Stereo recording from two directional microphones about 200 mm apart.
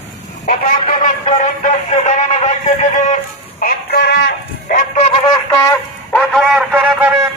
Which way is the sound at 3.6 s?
55° left (ahead or behind).